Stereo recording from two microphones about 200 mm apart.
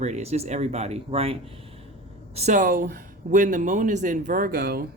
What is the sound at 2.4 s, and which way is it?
Speech, 40° right (ahead or behind).